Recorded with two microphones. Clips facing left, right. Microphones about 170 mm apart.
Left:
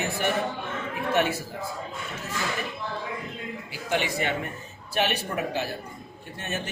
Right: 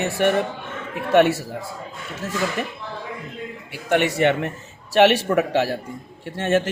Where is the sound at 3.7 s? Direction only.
65° right (ahead or behind).